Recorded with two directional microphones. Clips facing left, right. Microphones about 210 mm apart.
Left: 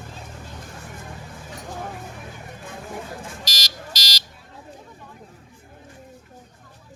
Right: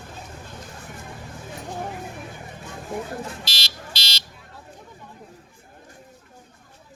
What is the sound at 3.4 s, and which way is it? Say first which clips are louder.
Buzzer: left 1 dB; 40° left (ahead or behind).